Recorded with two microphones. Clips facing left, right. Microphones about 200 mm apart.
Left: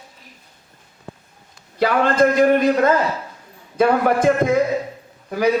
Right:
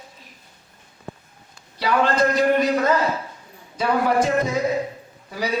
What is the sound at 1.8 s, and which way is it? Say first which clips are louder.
A man's voice: left 4 dB; 50° left (ahead or behind).